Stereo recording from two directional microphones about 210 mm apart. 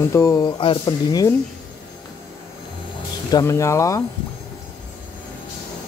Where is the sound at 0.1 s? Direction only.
15° left (ahead or behind).